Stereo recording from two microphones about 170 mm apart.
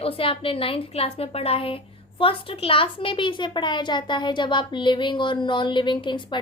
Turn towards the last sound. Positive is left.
turn(degrees=25)  # may be behind; listen again after turning